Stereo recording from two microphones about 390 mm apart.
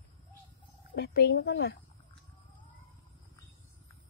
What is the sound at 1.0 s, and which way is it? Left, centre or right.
Speech, left.